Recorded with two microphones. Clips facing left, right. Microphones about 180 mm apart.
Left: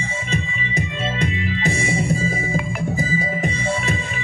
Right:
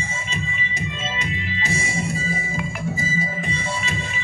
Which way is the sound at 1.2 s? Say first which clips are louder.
Left 7 dB; 55° left (ahead or behind).